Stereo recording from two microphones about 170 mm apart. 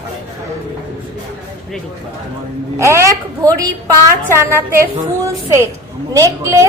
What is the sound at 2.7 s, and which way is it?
A woman's voice, 15° right (ahead or behind).